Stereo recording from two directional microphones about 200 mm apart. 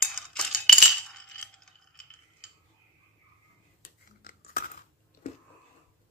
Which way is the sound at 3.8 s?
45° left (ahead or behind).